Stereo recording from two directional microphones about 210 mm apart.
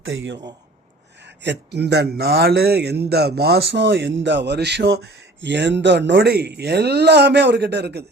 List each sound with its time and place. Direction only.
0.0 s a man's voice: 65° right (ahead or behind)
1.4 s speech: 55° right (ahead or behind)